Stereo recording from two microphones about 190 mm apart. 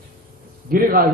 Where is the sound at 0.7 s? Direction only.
50° right (ahead or behind).